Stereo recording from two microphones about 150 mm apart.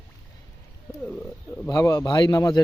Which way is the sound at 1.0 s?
10° left (ahead or behind).